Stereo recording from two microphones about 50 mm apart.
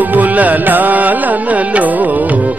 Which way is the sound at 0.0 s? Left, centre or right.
Right.